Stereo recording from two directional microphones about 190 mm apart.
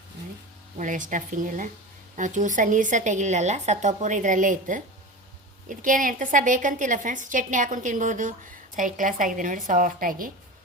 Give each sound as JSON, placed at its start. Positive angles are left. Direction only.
{"t": 0.8, "sound": "a woman's voice", "side_deg": -40}